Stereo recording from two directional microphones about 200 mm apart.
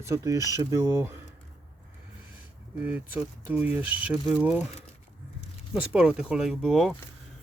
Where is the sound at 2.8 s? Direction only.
5° right (ahead or behind).